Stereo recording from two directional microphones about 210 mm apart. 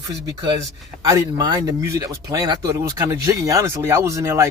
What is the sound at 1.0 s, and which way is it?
Speech, 15° right (ahead or behind).